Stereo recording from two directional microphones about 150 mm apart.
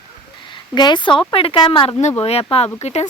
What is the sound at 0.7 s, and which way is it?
Speech, 30° left (ahead or behind).